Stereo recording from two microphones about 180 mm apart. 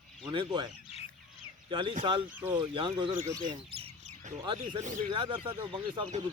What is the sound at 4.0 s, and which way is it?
Bird, 40° right (ahead or behind).